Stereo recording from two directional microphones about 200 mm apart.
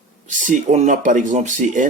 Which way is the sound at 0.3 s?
40° right (ahead or behind).